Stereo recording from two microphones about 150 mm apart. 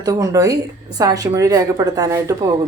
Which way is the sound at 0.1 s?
20° right (ahead or behind).